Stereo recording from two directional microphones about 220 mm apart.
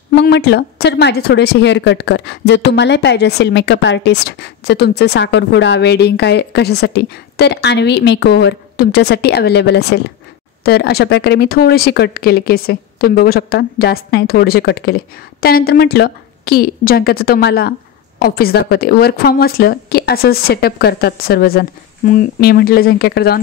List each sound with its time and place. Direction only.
0.1 s a woman's voice: 50° left (ahead or behind)